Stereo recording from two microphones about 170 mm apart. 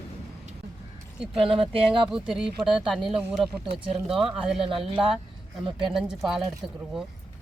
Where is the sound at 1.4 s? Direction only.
35° right (ahead or behind).